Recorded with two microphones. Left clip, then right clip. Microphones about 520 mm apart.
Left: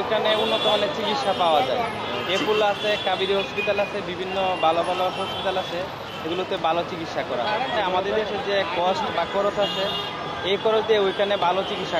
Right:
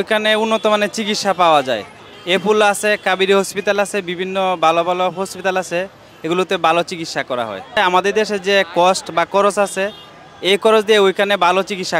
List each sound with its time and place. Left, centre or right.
0.1 s speech: right
6.3 s speech: right